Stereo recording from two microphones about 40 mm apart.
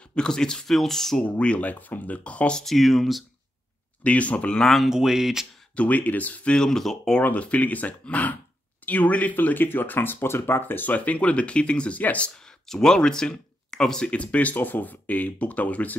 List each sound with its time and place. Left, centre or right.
0.1 s speech: centre
1.4 s speech: left
2.6 s speech: centre
4.0 s speech: left
4.8 s speech: centre
5.8 s speech: left
6.5 s speech: centre
7.3 s speech: left
10.6 s speech: left
12.4 s speech: centre
14.1 s speech: left
14.5 s speech: left